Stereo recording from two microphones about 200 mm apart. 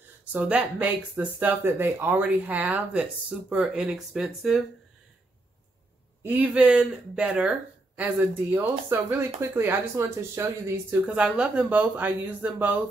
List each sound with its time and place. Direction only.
0.2 s speech: 5° right (ahead or behind)
6.2 s speech: 10° right (ahead or behind)